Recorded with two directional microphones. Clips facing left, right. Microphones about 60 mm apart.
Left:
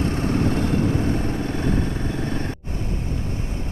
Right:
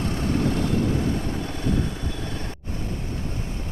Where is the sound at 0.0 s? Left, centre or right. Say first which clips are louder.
Left 2 dB; left.